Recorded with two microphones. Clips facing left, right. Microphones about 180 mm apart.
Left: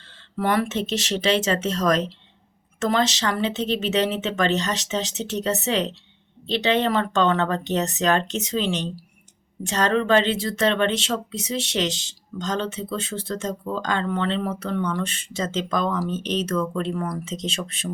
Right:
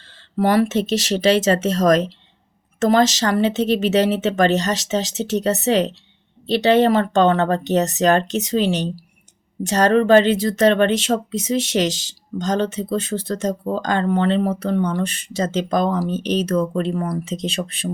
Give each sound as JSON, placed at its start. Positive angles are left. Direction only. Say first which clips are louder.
{"t": 0.0, "sound": "speech", "louder": "right 6 dB", "side_deg": -40}